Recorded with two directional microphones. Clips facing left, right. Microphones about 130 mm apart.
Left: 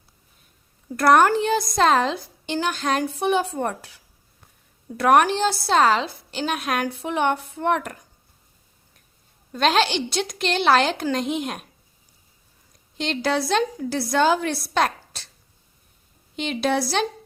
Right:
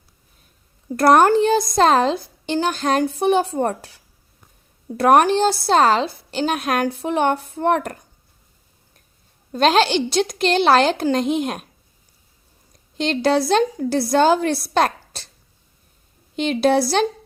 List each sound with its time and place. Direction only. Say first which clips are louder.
0.9 s a woman's voice: right 3 dB; 35° right (ahead or behind)
4.9 s a woman's voice: right 3 dB; 35° right (ahead or behind)
9.5 s a woman's voice: right 4 dB; 40° right (ahead or behind)
13.0 s a woman's voice: right 5 dB; 35° right (ahead or behind)
16.3 s a woman's voice: right 6 dB; 40° right (ahead or behind)